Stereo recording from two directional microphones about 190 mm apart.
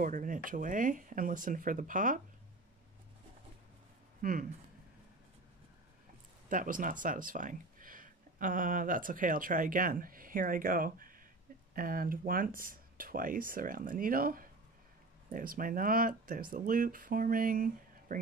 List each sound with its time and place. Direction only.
0.0 s speech: 45° right (ahead or behind)
4.2 s speech: 45° right (ahead or behind)
6.5 s speech: 45° right (ahead or behind)